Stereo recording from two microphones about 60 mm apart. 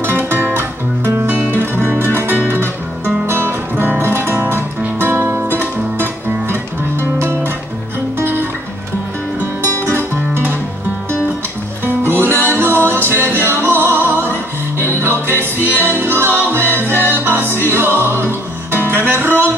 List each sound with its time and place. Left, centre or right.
0.0 s music: right
9.7 s music: left
9.9 s music: right
12.1 s music: right